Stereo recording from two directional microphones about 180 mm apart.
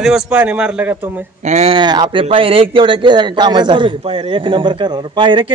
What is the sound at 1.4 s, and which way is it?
Speech, 40° right (ahead or behind).